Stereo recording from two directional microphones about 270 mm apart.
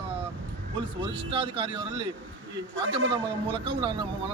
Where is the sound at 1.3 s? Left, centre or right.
Centre.